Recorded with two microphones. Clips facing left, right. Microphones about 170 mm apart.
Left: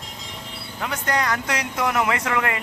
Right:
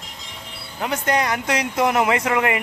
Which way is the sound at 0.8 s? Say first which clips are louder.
Right 3 dB; 20° right (ahead or behind).